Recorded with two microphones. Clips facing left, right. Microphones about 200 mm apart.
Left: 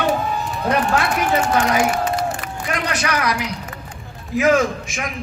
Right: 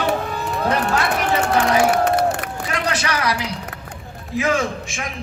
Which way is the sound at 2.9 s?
30° right (ahead or behind).